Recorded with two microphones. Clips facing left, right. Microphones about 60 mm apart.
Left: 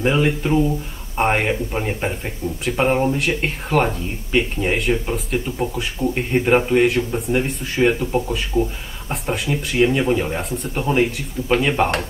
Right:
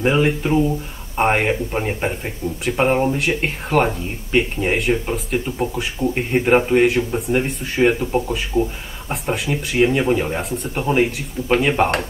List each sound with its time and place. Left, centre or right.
0.0 s speech: centre